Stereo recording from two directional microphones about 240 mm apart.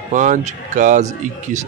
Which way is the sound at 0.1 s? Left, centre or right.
Right.